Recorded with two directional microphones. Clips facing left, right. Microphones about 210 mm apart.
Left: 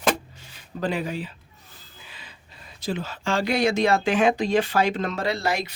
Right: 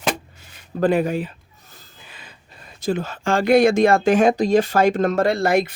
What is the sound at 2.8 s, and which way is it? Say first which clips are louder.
Speech: right 6 dB; 50° right (ahead or behind).